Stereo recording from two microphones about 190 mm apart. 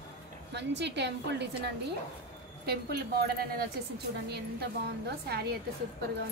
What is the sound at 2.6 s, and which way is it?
A woman's voice, 55° right (ahead or behind).